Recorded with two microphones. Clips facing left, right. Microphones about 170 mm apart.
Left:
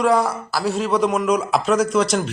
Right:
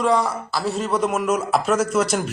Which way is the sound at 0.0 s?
Centre (ahead or behind).